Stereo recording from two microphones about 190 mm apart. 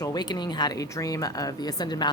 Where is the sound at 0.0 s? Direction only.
20° left (ahead or behind).